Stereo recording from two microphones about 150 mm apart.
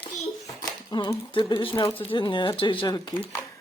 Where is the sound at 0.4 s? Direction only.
25° left (ahead or behind).